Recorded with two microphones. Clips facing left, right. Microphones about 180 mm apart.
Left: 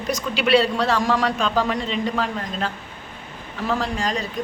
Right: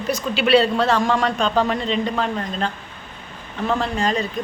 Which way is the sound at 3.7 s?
Centre (ahead or behind).